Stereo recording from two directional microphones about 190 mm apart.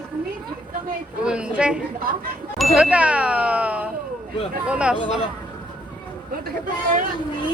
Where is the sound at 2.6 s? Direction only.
5° right (ahead or behind).